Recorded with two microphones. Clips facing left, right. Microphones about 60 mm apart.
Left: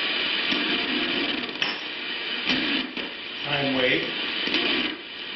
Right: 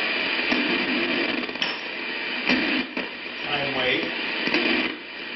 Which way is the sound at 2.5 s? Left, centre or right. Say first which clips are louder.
Right 3 dB; right.